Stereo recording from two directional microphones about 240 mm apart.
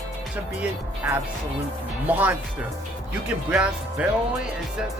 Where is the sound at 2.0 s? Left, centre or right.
Centre.